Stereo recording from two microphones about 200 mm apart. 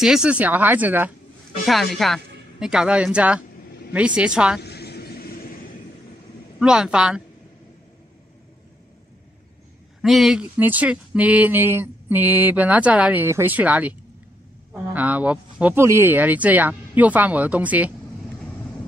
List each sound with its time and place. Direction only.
0.0 s a man's voice: 5° right (ahead or behind)
4.6 s vehicle: 55° left (ahead or behind)
6.6 s a man's voice: 5° right (ahead or behind)
10.0 s speech: centre (ahead or behind)